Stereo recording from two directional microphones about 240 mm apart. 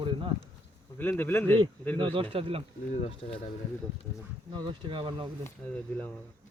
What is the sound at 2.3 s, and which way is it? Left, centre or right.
Speech, right.